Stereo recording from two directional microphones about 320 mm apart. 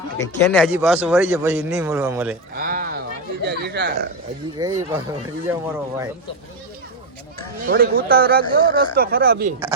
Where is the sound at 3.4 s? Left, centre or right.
Right.